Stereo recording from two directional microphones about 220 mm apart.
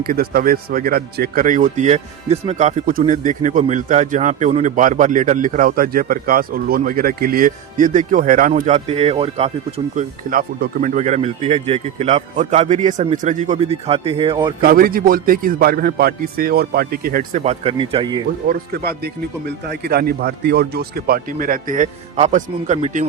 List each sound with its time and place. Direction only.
0.0 s speech: 40° right (ahead or behind); by 14.5 s 20° right (ahead or behind)
14.6 s speech: 40° right (ahead or behind); by 18.2 s 20° right (ahead or behind)
18.4 s speech: 45° right (ahead or behind)